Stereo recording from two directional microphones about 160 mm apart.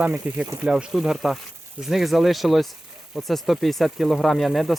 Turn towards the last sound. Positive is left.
turn(degrees=0)  # may be behind; listen again after turning